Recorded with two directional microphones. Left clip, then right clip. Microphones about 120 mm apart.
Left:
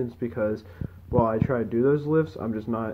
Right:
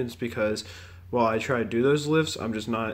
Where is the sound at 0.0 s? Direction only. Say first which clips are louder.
Even; 35° right (ahead or behind).